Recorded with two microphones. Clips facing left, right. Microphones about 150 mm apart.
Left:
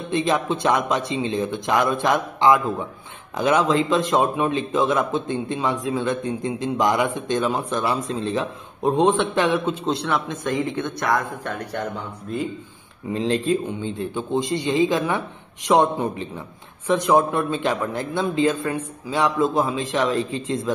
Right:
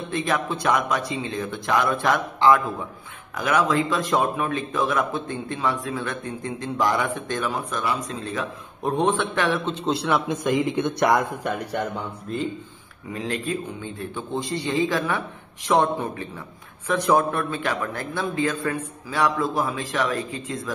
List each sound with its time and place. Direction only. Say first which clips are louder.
0.1 s speech: left 4 dB; 20° left (ahead or behind)
9.7 s a man's voice: even; centre (ahead or behind)
10.3 s speech: right 2 dB; 15° right (ahead or behind)
12.3 s a man's voice: left 2 dB; centre (ahead or behind)
13.1 s speech: left 6 dB; 25° left (ahead or behind)